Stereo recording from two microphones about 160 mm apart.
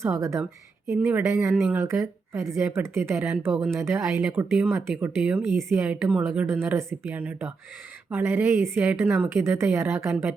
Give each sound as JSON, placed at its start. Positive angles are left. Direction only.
{"t": 0.0, "sound": "speech", "side_deg": -15}
{"t": 1.5, "sound": "speech", "side_deg": 0}
{"t": 1.8, "sound": "speech", "side_deg": -15}